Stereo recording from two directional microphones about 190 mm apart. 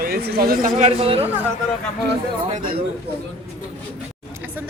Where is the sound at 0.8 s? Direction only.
30° right (ahead or behind).